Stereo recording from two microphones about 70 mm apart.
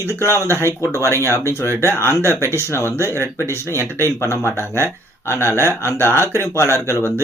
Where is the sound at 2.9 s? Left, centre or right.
Right.